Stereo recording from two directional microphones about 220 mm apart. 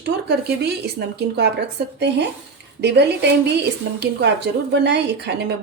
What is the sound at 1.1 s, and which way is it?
Speech, 50° right (ahead or behind).